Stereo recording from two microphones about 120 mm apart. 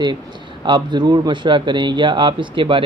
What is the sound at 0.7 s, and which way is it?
Speech, 40° right (ahead or behind).